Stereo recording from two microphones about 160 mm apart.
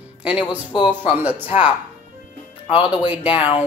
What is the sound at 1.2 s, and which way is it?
Speech, 10° right (ahead or behind).